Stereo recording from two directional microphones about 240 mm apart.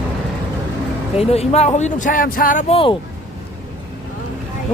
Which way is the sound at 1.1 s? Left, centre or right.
Left.